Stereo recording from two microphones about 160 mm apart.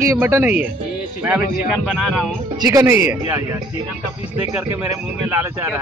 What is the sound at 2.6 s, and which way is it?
Speech, 15° right (ahead or behind).